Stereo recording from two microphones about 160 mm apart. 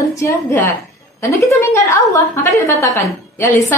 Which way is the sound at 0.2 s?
15° left (ahead or behind).